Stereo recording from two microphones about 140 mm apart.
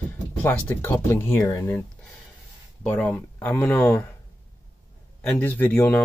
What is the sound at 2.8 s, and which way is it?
Speech, 10° left (ahead or behind).